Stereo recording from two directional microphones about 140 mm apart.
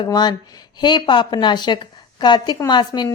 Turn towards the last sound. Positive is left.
turn(degrees=30)  # may be behind; listen again after turning